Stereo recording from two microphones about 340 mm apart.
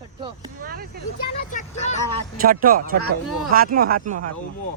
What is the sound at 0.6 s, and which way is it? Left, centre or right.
Speech, right.